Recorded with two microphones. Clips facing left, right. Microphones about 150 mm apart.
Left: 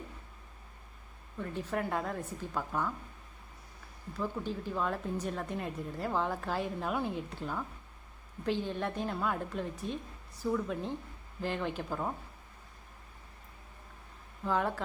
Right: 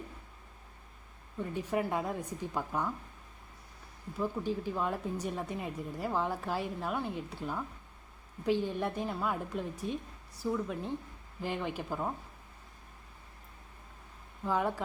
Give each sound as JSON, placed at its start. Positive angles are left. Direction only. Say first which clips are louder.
{"t": 1.4, "sound": "speech", "louder": "right 2 dB", "side_deg": -10}
{"t": 4.2, "sound": "speech", "louder": "right 2 dB", "side_deg": -10}
{"t": 14.4, "sound": "speech", "louder": "even", "side_deg": -10}